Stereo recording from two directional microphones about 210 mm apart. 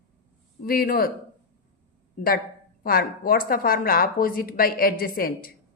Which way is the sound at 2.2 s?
40° left (ahead or behind).